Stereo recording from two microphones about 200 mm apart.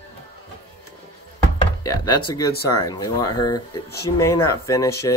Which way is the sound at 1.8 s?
20° left (ahead or behind).